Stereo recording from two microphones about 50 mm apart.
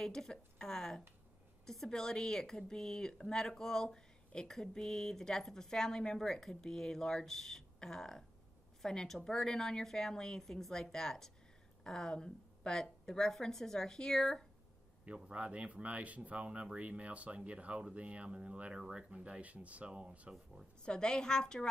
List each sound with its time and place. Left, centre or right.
0.0 s speech: centre
15.1 s speech: right
20.8 s speech: centre